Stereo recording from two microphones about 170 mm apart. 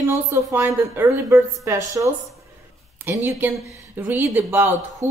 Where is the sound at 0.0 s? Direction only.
20° right (ahead or behind).